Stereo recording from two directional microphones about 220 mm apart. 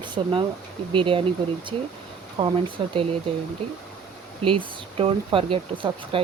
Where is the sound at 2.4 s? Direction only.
20° right (ahead or behind).